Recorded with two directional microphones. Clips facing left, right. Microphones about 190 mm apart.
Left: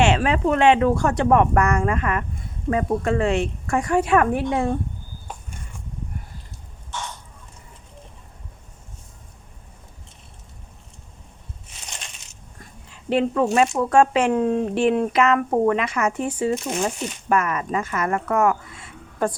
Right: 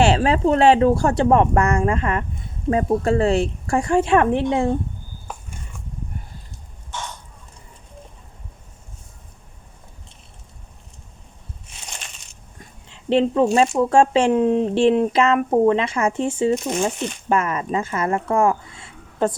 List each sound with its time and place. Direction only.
0.0 s speech: 35° right (ahead or behind)
12.5 s dog: 25° right (ahead or behind)
13.9 s speech: 30° right (ahead or behind)